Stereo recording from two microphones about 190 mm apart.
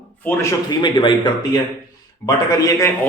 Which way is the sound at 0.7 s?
25° left (ahead or behind).